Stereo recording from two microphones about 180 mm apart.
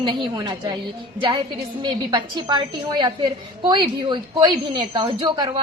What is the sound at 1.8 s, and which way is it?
A woman's voice, 25° right (ahead or behind).